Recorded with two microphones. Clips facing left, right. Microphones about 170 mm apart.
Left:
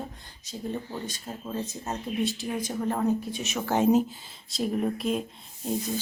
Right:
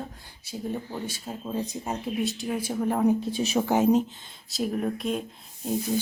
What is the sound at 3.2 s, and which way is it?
Speech, 30° right (ahead or behind).